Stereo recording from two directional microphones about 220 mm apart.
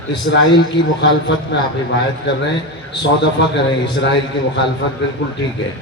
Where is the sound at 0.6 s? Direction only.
55° left (ahead or behind).